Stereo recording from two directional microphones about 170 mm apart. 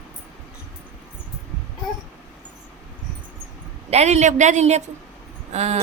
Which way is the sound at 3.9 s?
40° right (ahead or behind).